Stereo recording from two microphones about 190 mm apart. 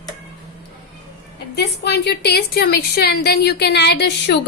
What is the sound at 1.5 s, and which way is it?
A woman's voice, 60° left (ahead or behind).